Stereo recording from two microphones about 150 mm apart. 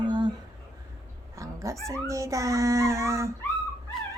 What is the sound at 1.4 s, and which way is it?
Speech, 20° right (ahead or behind).